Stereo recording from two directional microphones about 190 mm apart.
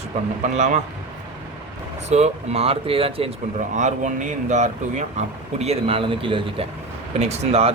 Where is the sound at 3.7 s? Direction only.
40° right (ahead or behind).